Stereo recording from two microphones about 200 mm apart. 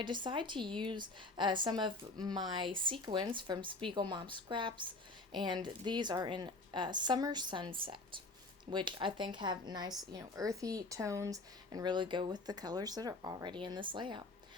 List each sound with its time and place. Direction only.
0.0 s speech: 25° right (ahead or behind)